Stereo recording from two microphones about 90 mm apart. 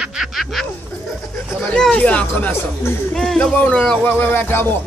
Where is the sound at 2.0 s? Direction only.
15° left (ahead or behind).